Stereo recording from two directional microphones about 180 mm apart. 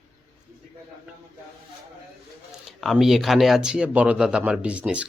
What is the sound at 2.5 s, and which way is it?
Speech, centre (ahead or behind).